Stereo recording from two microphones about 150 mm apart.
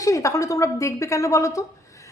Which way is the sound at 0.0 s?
20° left (ahead or behind).